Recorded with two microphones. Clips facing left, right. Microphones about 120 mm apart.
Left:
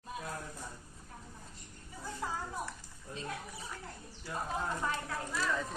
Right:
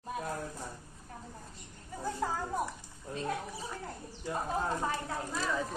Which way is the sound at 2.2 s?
50° right (ahead or behind).